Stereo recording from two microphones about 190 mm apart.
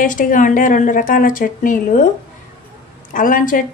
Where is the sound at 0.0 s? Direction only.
45° left (ahead or behind).